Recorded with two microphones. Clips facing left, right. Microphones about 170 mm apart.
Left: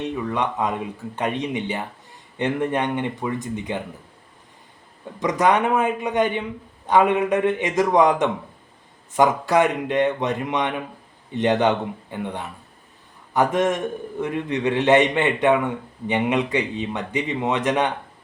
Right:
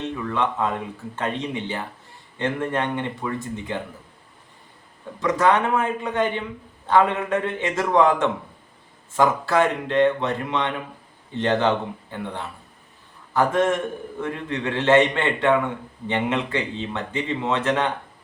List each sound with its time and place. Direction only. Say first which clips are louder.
0.3 s speech: right 2 dB; 15° left (ahead or behind)
5.2 s a man's voice: left 1 dB; 20° left (ahead or behind)